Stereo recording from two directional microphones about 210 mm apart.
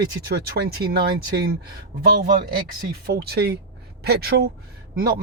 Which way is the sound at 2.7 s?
45° right (ahead or behind).